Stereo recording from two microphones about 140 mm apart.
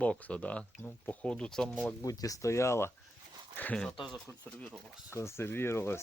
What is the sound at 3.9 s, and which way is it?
Speech, 35° left (ahead or behind).